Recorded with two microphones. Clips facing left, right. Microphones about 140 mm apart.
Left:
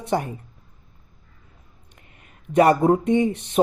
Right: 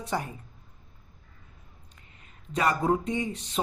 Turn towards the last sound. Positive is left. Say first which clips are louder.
# left 11 dB
turn(degrees=60)  # may be behind; listen again after turning